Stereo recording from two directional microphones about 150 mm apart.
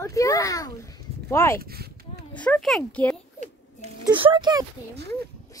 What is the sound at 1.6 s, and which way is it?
Speech, 90° right.